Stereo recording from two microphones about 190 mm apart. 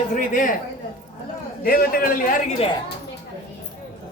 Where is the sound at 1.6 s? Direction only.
50° left (ahead or behind).